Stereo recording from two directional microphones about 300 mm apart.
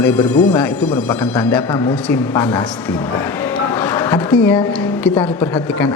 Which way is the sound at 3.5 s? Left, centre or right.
Centre.